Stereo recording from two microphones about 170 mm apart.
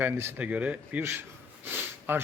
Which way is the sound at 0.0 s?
15° right (ahead or behind).